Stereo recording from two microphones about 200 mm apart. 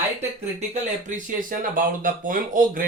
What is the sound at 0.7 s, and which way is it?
Speech, 40° right (ahead or behind).